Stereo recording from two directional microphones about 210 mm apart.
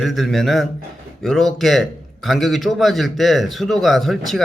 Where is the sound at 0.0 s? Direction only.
Centre (ahead or behind).